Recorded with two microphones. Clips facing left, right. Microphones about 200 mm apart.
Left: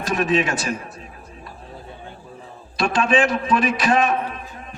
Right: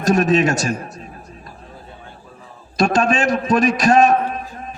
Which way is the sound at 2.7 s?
45° right (ahead or behind).